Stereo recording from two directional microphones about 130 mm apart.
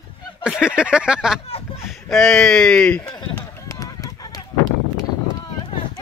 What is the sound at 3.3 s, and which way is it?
Run, 25° left (ahead or behind).